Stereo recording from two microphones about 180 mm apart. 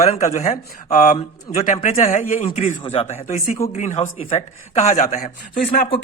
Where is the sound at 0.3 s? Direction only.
40° left (ahead or behind).